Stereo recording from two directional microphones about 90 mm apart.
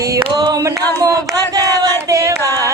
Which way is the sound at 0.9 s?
40° right (ahead or behind).